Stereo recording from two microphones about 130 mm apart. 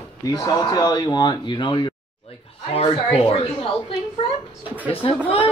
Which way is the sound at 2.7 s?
45° left (ahead or behind).